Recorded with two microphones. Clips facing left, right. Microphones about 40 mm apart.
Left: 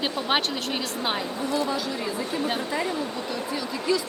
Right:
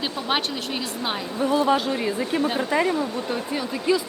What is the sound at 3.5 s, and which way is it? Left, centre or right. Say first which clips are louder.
Speech: right 3 dB; centre.